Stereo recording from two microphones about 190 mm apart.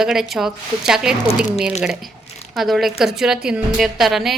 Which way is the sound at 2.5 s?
Centre (ahead or behind).